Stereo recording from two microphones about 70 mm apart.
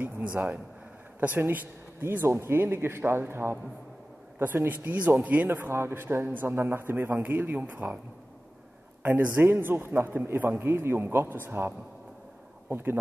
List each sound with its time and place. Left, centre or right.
0.0 s a man's voice: right
9.0 s a man's voice: right